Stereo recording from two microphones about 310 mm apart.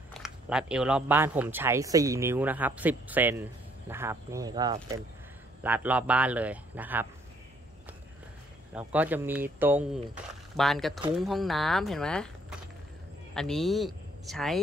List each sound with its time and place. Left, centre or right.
0.1 s speech: centre
8.7 s speech: centre